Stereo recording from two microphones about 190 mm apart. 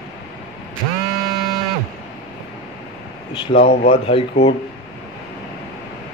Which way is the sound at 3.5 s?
45° left (ahead or behind).